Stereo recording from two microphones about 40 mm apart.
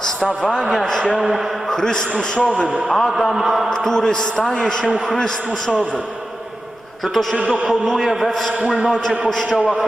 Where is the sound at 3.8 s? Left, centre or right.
Centre.